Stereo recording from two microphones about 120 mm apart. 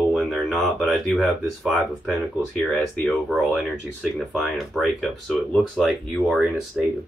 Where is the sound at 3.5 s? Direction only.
5° right (ahead or behind).